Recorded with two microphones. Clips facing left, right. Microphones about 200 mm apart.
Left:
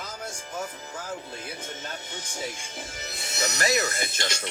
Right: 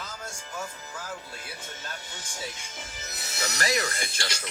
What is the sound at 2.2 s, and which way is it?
Speech, 35° left (ahead or behind).